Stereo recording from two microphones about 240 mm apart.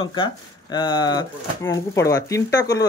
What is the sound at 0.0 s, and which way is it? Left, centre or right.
Speech, centre.